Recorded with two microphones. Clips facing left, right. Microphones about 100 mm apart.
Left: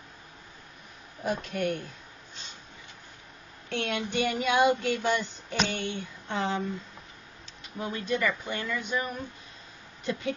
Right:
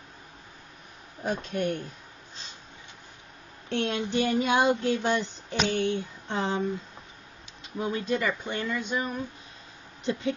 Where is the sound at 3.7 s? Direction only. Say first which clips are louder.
Right 3 dB; 25° right (ahead or behind).